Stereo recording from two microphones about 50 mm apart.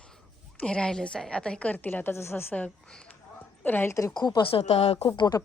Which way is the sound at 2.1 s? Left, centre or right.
Left.